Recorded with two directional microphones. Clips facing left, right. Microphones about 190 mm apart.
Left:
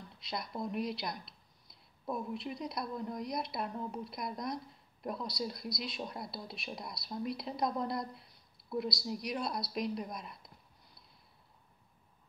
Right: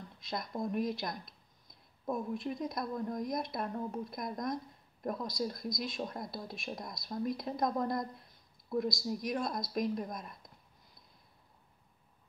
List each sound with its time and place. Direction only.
0.2 s speech: 45° right (ahead or behind)